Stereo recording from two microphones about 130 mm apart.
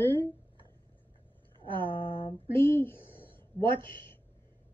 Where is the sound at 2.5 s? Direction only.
15° left (ahead or behind).